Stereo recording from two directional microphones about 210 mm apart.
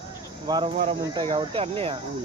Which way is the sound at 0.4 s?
20° right (ahead or behind).